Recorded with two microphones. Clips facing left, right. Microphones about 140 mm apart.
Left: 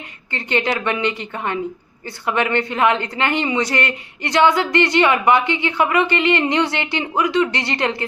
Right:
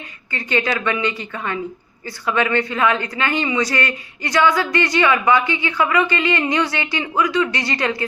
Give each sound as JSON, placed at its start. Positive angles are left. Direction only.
{"t": 0.3, "sound": "speech", "side_deg": 20}